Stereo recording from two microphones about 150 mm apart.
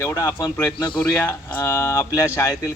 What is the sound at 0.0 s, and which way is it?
Speech, 20° left (ahead or behind).